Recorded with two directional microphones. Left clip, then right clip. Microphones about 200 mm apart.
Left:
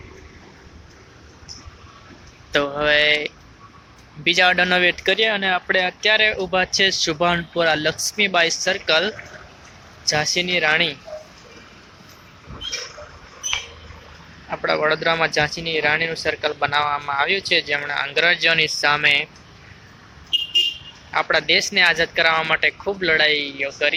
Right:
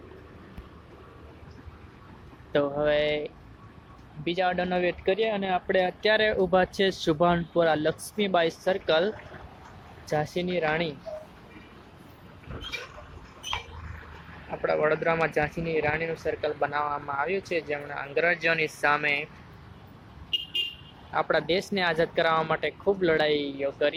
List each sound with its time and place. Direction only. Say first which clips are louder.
2.5 s speech: left 6 dB; 5° right (ahead or behind)
10.3 s speech: left 11 dB; 5° right (ahead or behind)
14.5 s speech: left 5 dB; centre (ahead or behind)
21.1 s speech: left 7 dB; 5° right (ahead or behind)